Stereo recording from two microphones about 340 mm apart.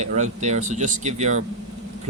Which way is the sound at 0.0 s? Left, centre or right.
Centre.